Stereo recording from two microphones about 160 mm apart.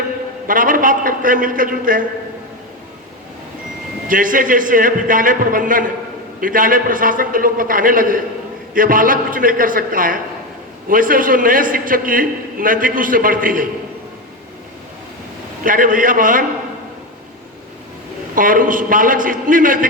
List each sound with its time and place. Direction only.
0.4 s a man's voice: 60° right (ahead or behind)
4.1 s a man's voice: 55° right (ahead or behind)
15.6 s a man's voice: 60° right (ahead or behind)
18.3 s a man's voice: 60° right (ahead or behind)